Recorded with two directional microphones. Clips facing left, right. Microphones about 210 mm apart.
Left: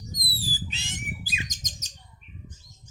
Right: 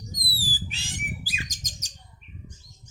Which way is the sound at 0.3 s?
20° left (ahead or behind).